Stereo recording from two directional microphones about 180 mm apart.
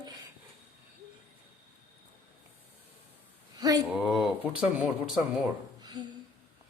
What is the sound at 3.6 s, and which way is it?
Speech, 20° right (ahead or behind).